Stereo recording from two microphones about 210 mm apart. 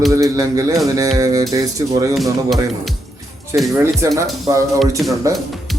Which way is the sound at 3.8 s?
15° right (ahead or behind).